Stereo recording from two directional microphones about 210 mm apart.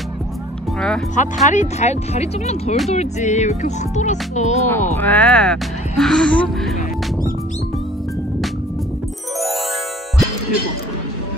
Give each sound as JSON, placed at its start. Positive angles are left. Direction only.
{"t": 0.7, "sound": "speech", "side_deg": 5}
{"t": 1.1, "sound": "speech", "side_deg": 35}
{"t": 4.6, "sound": "speech", "side_deg": 10}